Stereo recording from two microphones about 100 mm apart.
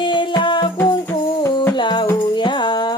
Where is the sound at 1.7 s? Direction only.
50° left (ahead or behind).